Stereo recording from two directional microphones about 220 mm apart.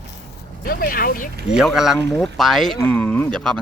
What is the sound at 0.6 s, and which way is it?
Speech, 40° left (ahead or behind).